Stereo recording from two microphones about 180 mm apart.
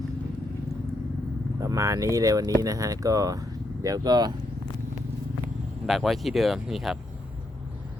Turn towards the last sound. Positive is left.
turn(degrees=0)  # may be behind; listen again after turning